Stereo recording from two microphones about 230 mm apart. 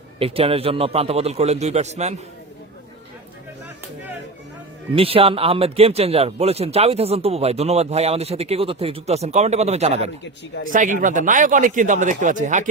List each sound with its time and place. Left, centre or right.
0.2 s speech: right
4.9 s speech: right